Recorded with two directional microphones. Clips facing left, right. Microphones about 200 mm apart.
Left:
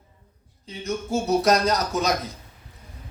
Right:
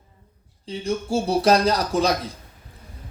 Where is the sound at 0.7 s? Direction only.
30° right (ahead or behind).